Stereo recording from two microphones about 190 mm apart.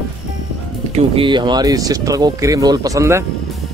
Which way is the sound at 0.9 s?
30° right (ahead or behind).